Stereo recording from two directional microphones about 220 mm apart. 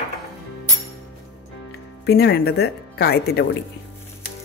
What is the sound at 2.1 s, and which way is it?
Speech, 45° left (ahead or behind).